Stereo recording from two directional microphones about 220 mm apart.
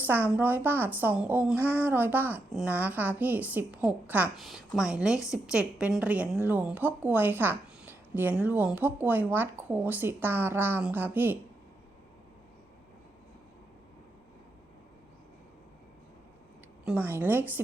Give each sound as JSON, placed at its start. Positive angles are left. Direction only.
{"t": 0.0, "sound": "a woman's voice", "side_deg": -10}
{"t": 16.8, "sound": "a woman's voice", "side_deg": -5}